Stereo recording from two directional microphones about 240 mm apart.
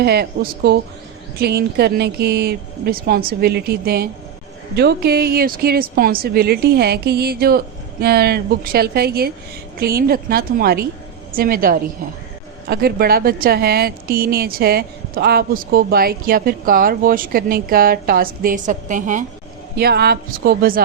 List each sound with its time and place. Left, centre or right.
0.0 s a woman's voice: right